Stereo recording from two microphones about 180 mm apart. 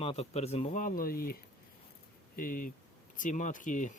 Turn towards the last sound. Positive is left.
turn(degrees=45)  # may be behind; listen again after turning